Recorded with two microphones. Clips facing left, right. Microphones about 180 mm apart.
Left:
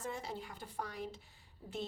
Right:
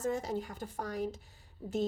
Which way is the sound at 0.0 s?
45° right (ahead or behind).